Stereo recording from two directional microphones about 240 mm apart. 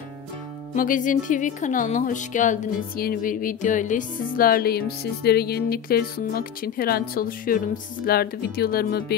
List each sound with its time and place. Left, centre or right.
0.7 s speech: left